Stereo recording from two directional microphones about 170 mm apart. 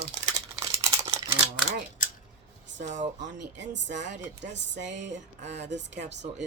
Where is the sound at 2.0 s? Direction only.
50° left (ahead or behind).